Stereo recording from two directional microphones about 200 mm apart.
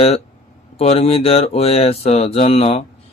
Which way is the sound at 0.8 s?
30° left (ahead or behind).